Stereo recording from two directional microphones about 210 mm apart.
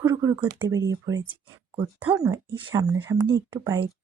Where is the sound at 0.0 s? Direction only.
15° right (ahead or behind).